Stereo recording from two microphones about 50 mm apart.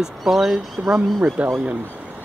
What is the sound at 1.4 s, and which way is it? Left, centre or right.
Speech, right.